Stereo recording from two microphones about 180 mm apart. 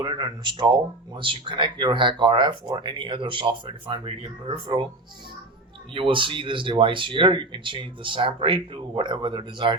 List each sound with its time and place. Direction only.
0.0 s speech: 25° right (ahead or behind)
5.9 s speech: 30° right (ahead or behind)